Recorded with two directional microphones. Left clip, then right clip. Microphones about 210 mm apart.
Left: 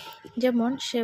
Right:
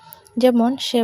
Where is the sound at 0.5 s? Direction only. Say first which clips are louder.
Right 8 dB; 25° right (ahead or behind).